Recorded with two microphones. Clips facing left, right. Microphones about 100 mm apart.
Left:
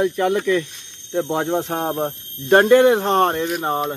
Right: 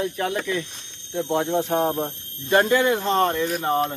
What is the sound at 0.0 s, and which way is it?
Speech, 65° left (ahead or behind).